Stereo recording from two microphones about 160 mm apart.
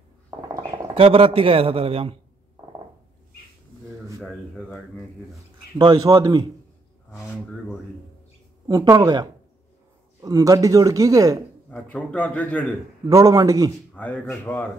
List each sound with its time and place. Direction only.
0.9 s a man's voice: 35° right (ahead or behind)
5.8 s a man's voice: 25° right (ahead or behind)
8.6 s a man's voice: 25° right (ahead or behind)
11.7 s a man's voice: 10° left (ahead or behind)
13.1 s a man's voice: 20° right (ahead or behind)
13.9 s a man's voice: 10° left (ahead or behind)